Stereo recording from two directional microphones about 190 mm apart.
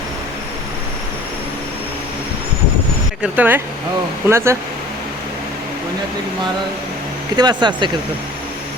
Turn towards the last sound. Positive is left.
turn(degrees=-25)  # may be behind; listen again after turning